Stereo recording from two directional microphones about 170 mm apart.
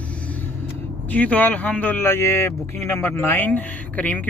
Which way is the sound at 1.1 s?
10° left (ahead or behind).